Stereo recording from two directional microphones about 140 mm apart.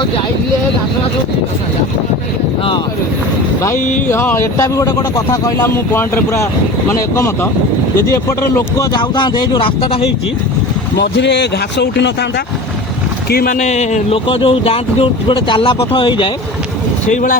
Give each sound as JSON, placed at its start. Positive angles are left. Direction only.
{"t": 4.1, "sound": "speech", "side_deg": 15}
{"t": 8.5, "sound": "speech", "side_deg": 25}
{"t": 13.3, "sound": "speech", "side_deg": 80}
{"t": 14.3, "sound": "speech", "side_deg": 40}
{"t": 17.1, "sound": "speech", "side_deg": 60}